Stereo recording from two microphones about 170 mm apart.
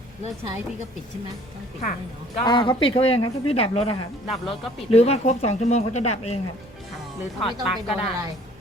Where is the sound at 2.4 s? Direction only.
30° left (ahead or behind).